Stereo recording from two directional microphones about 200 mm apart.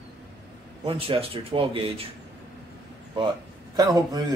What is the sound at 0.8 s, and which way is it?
Speech, 30° right (ahead or behind).